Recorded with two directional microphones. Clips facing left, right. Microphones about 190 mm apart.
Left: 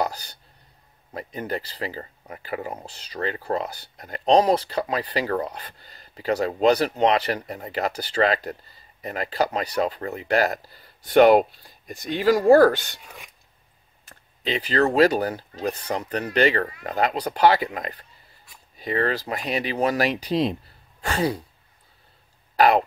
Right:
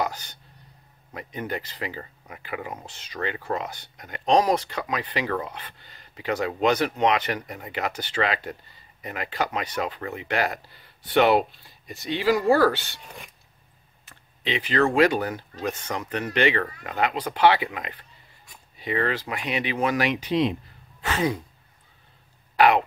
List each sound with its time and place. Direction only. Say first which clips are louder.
0.0 s a sound: left 2 dB; 35° left (ahead or behind)
1.1 s speech: left 2 dB; 35° left (ahead or behind)
14.0 s speech: left 2 dB; 40° left (ahead or behind)
22.6 s speech: left 1 dB; 40° left (ahead or behind)